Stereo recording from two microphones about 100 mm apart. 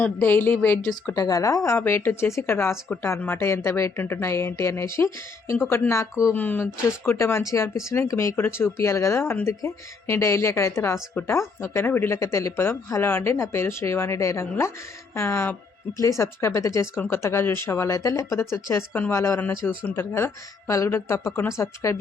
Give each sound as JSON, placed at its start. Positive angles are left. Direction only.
{"t": 0.0, "sound": "speech", "side_deg": 20}
{"t": 1.1, "sound": "speech", "side_deg": 35}